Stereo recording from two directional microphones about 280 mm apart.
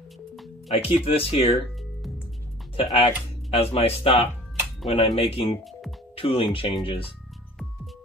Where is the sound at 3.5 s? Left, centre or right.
Centre.